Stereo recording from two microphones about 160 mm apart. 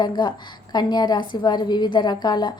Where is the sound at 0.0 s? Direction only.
25° left (ahead or behind).